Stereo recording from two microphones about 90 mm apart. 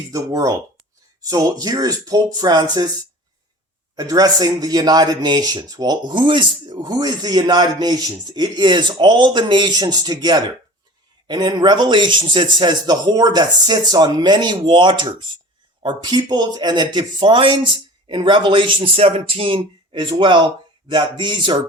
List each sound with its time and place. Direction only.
0.1 s speech: 40° right (ahead or behind)
3.9 s a man's voice: 45° right (ahead or behind)